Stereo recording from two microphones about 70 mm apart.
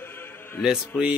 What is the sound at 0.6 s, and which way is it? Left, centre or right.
Mantra, centre.